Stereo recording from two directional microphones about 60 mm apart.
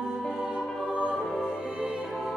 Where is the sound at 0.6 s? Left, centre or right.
Centre.